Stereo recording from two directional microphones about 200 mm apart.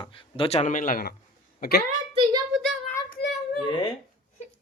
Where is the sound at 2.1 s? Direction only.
20° right (ahead or behind).